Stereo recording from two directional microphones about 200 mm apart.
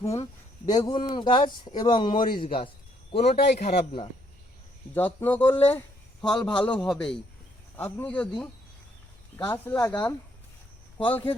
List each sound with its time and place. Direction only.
0.2 s a man's voice: 25° left (ahead or behind)
3.3 s a man's voice: 50° left (ahead or behind)
3.8 s speech: 25° left (ahead or behind)
4.9 s a man's voice: 10° left (ahead or behind)
9.4 s speech: 10° left (ahead or behind)